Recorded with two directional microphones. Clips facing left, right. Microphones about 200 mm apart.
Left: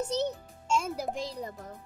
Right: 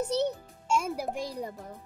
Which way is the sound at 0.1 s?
15° right (ahead or behind).